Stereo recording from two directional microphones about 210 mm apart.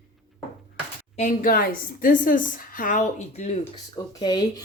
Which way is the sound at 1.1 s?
40° left (ahead or behind).